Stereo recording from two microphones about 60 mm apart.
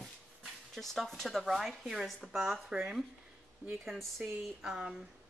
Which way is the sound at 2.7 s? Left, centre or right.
Centre.